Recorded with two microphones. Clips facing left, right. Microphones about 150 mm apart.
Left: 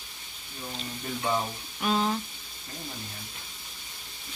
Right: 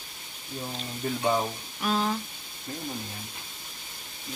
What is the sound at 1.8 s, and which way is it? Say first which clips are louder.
Speech: left 1 dB; centre (ahead or behind).